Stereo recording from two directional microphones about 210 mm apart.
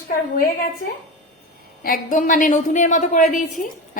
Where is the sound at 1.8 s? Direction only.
40° left (ahead or behind).